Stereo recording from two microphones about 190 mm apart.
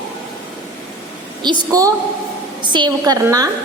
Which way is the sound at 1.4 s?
20° right (ahead or behind).